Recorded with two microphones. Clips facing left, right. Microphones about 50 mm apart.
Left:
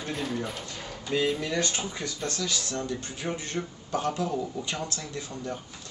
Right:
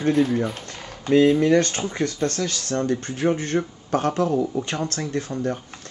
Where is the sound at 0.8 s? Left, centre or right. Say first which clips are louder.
Right 11 dB; right.